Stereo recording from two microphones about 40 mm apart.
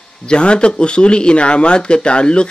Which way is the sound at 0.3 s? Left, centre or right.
Left.